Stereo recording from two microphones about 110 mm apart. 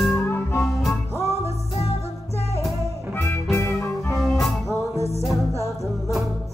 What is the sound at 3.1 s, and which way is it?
Music, 20° left (ahead or behind).